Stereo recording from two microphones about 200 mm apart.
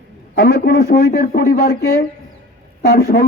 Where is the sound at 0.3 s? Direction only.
50° left (ahead or behind).